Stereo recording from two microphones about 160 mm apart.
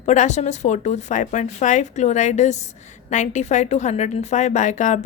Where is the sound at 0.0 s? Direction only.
45° left (ahead or behind).